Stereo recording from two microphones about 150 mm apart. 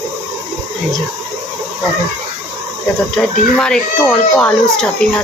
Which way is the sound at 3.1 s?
5° left (ahead or behind).